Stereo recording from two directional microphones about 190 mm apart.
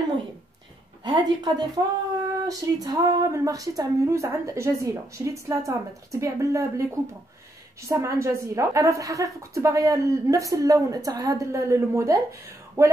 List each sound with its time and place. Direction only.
1.0 s a woman's voice: 25° right (ahead or behind)